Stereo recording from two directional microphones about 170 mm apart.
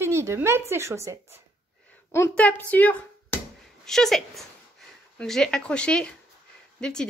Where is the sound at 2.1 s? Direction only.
10° left (ahead or behind).